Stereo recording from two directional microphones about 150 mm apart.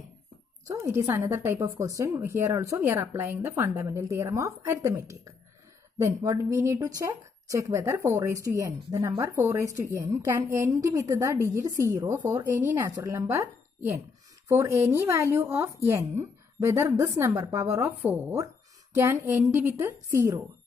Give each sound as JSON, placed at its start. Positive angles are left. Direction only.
{"t": 0.7, "sound": "a woman's voice", "side_deg": -15}